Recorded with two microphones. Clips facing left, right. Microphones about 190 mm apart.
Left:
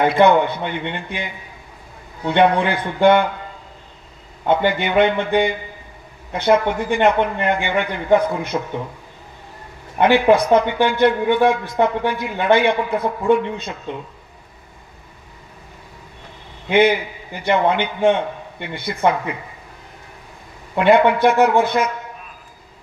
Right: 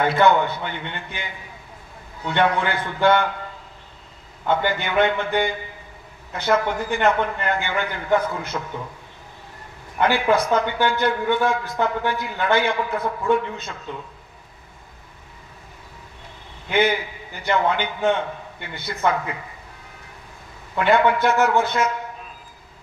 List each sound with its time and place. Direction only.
0.0 s a man's voice: 20° left (ahead or behind)
2.2 s a man's voice: 20° left (ahead or behind)
4.5 s a man's voice: 20° left (ahead or behind)
9.9 s a man's voice: 20° left (ahead or behind)
16.6 s a man's voice: 20° left (ahead or behind)
20.7 s a man's voice: 20° left (ahead or behind)